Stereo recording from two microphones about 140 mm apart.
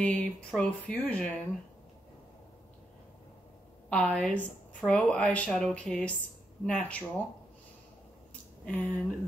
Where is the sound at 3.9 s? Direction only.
10° left (ahead or behind).